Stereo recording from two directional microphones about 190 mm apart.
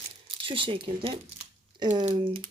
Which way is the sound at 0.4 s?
30° right (ahead or behind).